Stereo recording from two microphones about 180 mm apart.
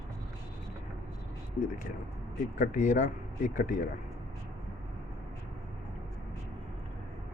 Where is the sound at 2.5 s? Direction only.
45° left (ahead or behind).